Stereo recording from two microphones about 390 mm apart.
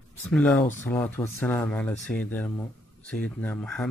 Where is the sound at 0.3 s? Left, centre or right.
Centre.